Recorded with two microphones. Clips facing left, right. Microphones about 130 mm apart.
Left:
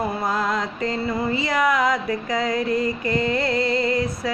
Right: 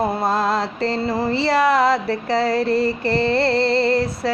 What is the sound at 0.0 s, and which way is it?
Mantra, 30° right (ahead or behind).